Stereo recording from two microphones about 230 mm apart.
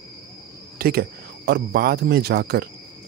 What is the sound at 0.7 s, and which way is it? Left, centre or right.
Speech, right.